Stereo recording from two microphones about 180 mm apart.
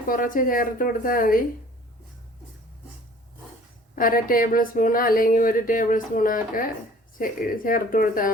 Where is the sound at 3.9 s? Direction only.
50° left (ahead or behind).